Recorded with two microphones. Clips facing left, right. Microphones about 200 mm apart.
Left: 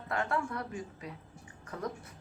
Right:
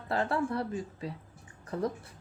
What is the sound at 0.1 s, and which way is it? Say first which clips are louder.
A woman's voice: right 4 dB; 30° right (ahead or behind).